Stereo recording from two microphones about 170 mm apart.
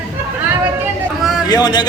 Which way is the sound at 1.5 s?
25° left (ahead or behind).